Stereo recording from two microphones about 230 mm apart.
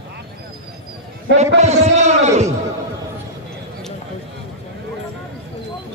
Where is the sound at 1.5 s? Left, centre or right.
Right.